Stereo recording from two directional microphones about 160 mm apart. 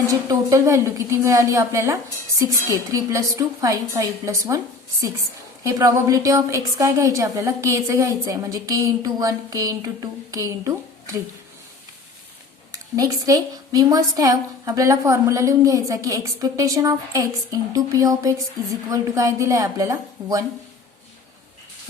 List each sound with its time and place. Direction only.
0.1 s a woman's voice: 20° right (ahead or behind)
13.0 s a woman's voice: 20° right (ahead or behind)